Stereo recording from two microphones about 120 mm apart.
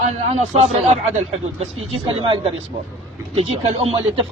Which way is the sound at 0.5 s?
65° right (ahead or behind).